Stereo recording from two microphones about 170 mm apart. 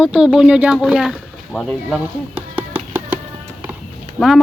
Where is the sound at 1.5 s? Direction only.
5° right (ahead or behind).